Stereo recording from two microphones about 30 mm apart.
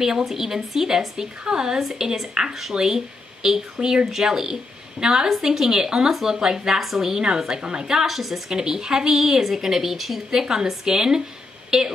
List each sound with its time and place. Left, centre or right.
0.0 s a woman's voice: centre
8.1 s a woman's voice: centre
8.5 s a woman's voice: centre
9.1 s a woman's voice: centre
10.4 s a woman's voice: centre